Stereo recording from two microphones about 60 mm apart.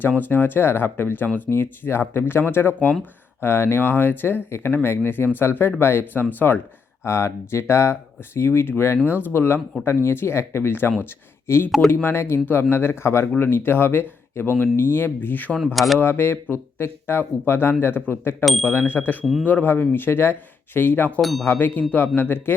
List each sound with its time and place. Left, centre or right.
0.2 s speech: left
15.5 s speech: centre
16.0 s speech: left
19.2 s speech: centre
19.5 s speech: left
21.2 s speech: centre
21.4 s speech: left